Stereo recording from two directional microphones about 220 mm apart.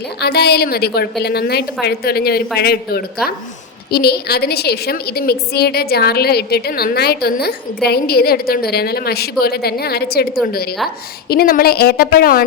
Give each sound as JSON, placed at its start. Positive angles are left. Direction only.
{"t": 0.2, "sound": "a woman's voice", "side_deg": 45}